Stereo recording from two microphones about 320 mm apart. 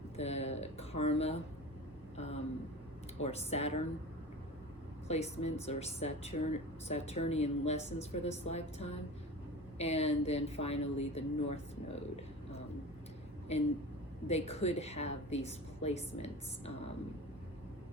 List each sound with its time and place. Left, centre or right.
0.2 s speech: centre
2.1 s a sound: centre
3.2 s speech: centre
5.0 s speech: centre
13.5 s speech: centre